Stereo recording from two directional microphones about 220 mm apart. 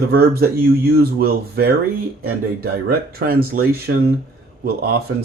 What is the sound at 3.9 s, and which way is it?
Speech, 55° right (ahead or behind).